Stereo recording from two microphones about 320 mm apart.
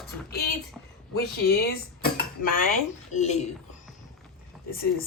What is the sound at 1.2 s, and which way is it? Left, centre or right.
Speech, left.